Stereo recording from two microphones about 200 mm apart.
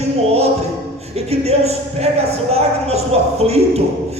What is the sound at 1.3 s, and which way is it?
Speech, 30° right (ahead or behind).